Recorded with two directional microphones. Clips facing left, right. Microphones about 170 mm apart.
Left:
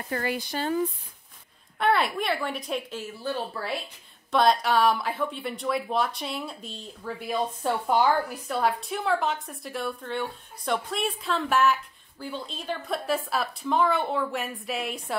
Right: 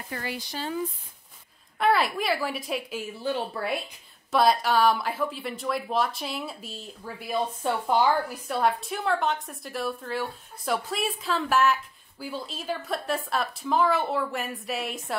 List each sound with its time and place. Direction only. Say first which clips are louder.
0.1 s speech: left 5 dB; 50° left (ahead or behind)
1.8 s a woman's voice: right 1 dB; centre (ahead or behind); by 3.7 s 20° right (ahead or behind)
4.3 s a woman's voice: even; 5° right (ahead or behind)